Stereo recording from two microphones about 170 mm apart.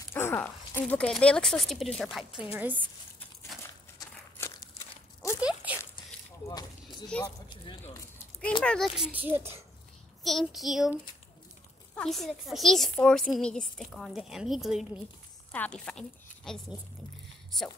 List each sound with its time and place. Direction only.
0.1 s a child's voice: 15° left (ahead or behind); by 2.9 s 10° right (ahead or behind)
3.6 s crumpling: 20° left (ahead or behind)
5.4 s a sound: 5° right (ahead or behind)
6.9 s speech: 5° left (ahead or behind)
8.6 s a child's voice: centre (ahead or behind)
10.2 s a woman's voice: centre (ahead or behind)